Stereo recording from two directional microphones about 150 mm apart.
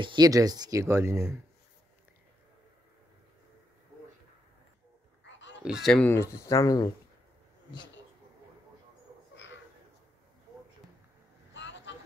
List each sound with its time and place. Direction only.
0.0 s speech: 30° right (ahead or behind)
5.6 s speech: 5° right (ahead or behind)
6.0 s speech: 15° left (ahead or behind)